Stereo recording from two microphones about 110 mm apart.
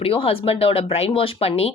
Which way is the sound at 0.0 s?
60° left (ahead or behind).